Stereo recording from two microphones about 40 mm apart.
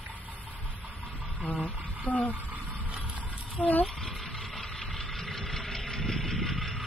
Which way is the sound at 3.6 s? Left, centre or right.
Left.